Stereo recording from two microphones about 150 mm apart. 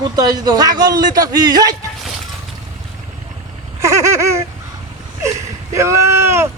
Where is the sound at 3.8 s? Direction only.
20° right (ahead or behind).